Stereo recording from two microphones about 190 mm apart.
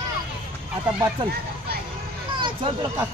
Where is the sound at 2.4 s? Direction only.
25° right (ahead or behind).